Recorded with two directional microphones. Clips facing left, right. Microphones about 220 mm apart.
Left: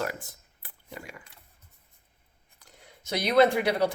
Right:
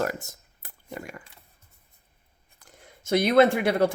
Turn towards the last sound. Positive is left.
turn(degrees=-50)  # may be behind; listen again after turning